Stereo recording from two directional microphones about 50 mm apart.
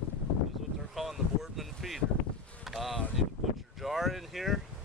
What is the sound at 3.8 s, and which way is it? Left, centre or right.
Vehicle, centre.